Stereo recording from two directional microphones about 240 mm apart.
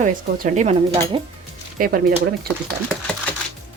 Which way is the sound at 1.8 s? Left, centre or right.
Right.